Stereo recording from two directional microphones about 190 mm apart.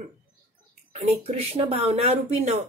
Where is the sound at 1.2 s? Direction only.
30° right (ahead or behind).